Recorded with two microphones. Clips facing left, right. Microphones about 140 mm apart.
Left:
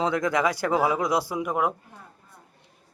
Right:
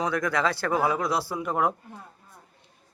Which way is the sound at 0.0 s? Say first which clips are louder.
Left 2 dB; 20° left (ahead or behind).